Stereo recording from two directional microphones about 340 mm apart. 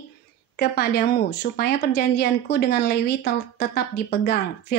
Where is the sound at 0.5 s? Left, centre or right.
Left.